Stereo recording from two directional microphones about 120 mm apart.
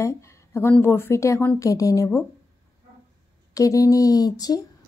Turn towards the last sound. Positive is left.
turn(degrees=30)  # may be behind; listen again after turning